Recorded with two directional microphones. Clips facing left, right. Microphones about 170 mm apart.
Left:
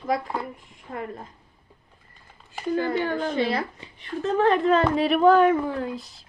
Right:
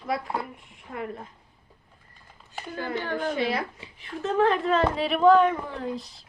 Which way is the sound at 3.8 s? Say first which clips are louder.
Left 3 dB; centre (ahead or behind).